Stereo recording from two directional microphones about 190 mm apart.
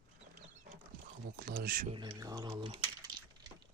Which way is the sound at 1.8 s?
25° right (ahead or behind).